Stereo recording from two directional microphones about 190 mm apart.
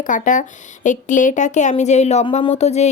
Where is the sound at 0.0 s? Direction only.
45° left (ahead or behind).